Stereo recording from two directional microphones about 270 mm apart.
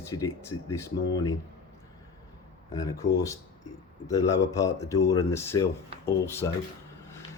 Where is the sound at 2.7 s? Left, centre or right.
Centre.